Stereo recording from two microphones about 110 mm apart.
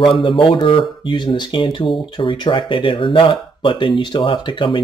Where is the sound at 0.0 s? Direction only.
50° left (ahead or behind).